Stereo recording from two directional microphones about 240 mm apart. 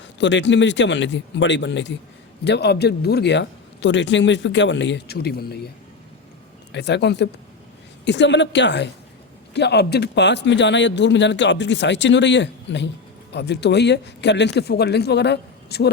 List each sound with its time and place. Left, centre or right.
0.2 s a man's voice: left
6.7 s a man's voice: left